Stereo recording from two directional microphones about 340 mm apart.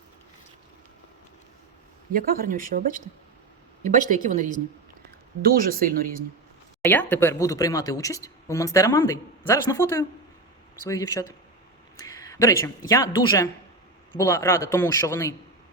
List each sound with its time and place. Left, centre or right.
2.1 s speech: right
6.8 s speech: centre